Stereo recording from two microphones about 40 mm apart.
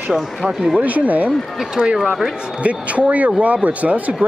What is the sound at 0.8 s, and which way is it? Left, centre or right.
Speech, right.